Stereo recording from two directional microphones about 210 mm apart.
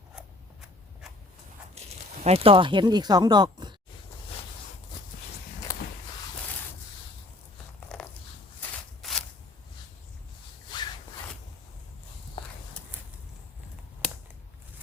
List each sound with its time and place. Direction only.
1.8 s a sound: 30° right (ahead or behind)
2.2 s speech: 30° right (ahead or behind)
5.7 s walk: 15° left (ahead or behind)
7.8 s biting: 5° left (ahead or behind)
8.6 s a sound: 10° left (ahead or behind)
10.7 s rub: 20° left (ahead or behind)
12.4 s walk: 25° left (ahead or behind)